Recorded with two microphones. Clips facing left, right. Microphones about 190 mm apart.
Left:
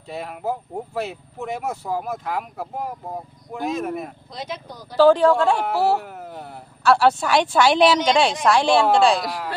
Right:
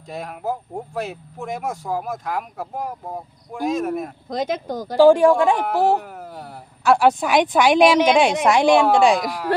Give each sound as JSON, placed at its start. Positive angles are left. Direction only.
{"t": 0.1, "sound": "speech", "side_deg": 0}
{"t": 4.3, "sound": "speech", "side_deg": -50}
{"t": 4.9, "sound": "a woman's voice", "side_deg": -15}
{"t": 6.0, "sound": "speech", "side_deg": 0}
{"t": 6.8, "sound": "a woman's voice", "side_deg": -15}